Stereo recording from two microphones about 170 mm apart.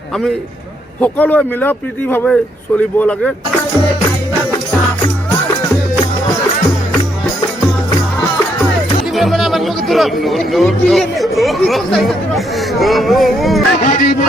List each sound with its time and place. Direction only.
1.0 s speech: 10° left (ahead or behind)
9.1 s speech: centre (ahead or behind)
13.7 s music: 50° left (ahead or behind)